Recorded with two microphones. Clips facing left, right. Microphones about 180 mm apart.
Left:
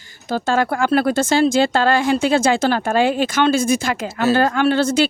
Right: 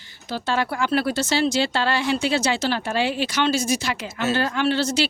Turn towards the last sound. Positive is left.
turn(degrees=50)  # may be behind; listen again after turning